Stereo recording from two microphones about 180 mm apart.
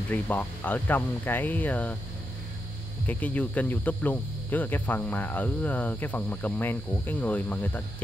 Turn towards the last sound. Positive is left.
turn(degrees=10)  # may be behind; listen again after turning